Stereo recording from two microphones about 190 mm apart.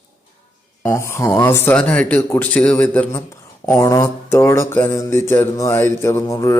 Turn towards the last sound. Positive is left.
turn(degrees=15)  # may be behind; listen again after turning